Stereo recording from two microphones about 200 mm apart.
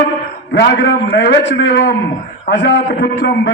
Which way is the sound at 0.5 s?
60° left (ahead or behind).